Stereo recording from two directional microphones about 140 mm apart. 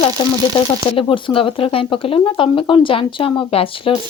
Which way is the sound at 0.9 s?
40° left (ahead or behind).